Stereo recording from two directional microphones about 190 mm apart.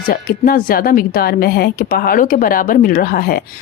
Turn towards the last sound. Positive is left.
turn(degrees=50)  # may be behind; listen again after turning